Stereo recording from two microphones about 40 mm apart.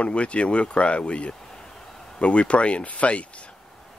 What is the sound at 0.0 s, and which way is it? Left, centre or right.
Speech, left.